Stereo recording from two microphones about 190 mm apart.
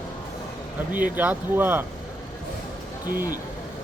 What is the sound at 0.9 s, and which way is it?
Speech, 45° right (ahead or behind).